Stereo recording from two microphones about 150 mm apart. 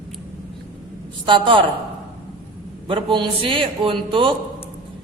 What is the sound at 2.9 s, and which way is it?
A man's voice, 35° right (ahead or behind).